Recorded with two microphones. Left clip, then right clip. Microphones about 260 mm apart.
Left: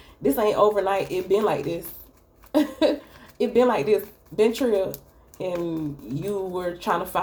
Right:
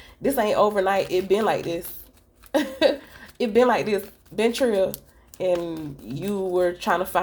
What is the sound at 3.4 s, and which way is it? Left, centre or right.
Speech, right.